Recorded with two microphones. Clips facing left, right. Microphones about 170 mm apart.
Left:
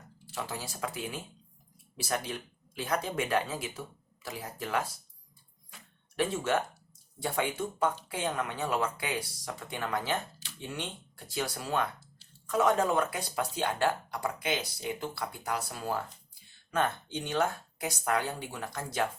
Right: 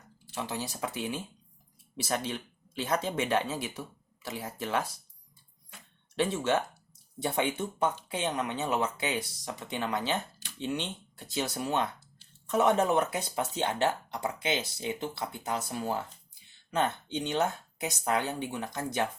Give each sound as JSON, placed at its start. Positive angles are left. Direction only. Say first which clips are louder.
{"t": 0.3, "sound": "speech", "louder": "right 3 dB", "side_deg": -20}
{"t": 6.1, "sound": "speech", "louder": "right 1 dB", "side_deg": -20}